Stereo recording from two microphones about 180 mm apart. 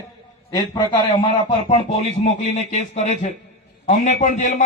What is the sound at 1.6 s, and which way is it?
A man's voice, 35° left (ahead or behind).